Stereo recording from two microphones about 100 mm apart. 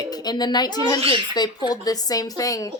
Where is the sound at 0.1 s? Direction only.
45° left (ahead or behind).